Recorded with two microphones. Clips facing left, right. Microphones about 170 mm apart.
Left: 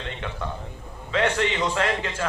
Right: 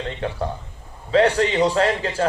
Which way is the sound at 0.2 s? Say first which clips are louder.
Right 6 dB; 35° right (ahead or behind).